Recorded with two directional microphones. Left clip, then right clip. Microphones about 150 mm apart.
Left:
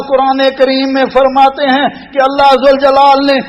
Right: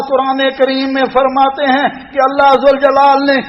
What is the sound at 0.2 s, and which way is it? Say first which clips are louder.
A man's voice: left 4 dB; 40° left (ahead or behind).